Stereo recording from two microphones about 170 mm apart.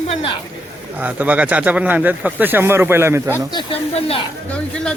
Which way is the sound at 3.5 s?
30° left (ahead or behind).